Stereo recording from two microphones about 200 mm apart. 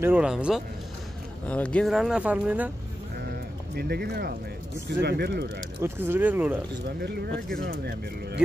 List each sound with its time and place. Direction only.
0.0 s speech: 5° right (ahead or behind)
1.5 s speech: 5° left (ahead or behind)
3.7 s speech: 55° right (ahead or behind)
5.8 s speech: 10° right (ahead or behind)
7.0 s speech: 55° right (ahead or behind)